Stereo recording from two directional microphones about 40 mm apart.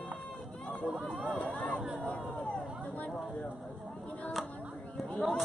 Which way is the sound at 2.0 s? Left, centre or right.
Left.